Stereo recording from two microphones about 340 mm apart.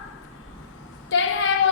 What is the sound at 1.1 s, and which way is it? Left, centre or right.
Speech, left.